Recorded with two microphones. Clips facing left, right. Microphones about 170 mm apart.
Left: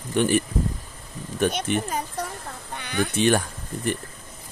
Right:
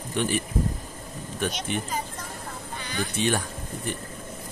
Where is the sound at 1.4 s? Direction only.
50° left (ahead or behind).